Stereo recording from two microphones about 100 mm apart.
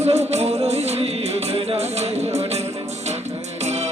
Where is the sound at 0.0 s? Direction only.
90° right.